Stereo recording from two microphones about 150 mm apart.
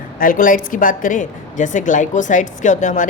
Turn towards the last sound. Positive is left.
turn(degrees=55)  # may be behind; listen again after turning